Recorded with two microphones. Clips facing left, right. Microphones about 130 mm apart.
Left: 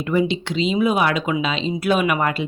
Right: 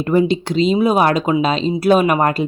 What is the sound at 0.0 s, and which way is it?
Speech, 40° right (ahead or behind).